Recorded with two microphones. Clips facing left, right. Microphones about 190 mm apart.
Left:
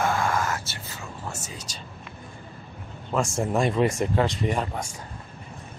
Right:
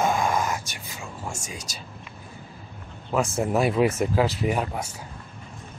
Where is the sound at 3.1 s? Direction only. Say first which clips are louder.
Right 1 dB; 5° right (ahead or behind).